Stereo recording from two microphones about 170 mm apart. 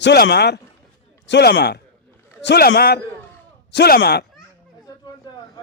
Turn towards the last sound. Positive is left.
turn(degrees=25)  # may be behind; listen again after turning